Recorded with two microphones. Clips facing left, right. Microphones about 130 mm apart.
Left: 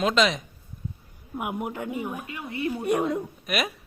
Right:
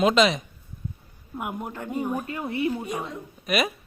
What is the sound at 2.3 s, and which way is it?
Speech, 35° right (ahead or behind).